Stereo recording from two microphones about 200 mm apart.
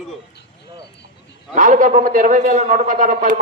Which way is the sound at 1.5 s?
40° right (ahead or behind).